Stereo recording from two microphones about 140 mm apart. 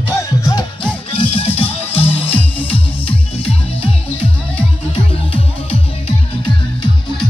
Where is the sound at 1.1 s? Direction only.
40° left (ahead or behind).